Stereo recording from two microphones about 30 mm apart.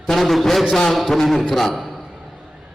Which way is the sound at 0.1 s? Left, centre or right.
Centre.